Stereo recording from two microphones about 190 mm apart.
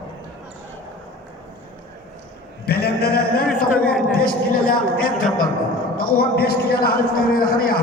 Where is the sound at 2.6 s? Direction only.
55° left (ahead or behind).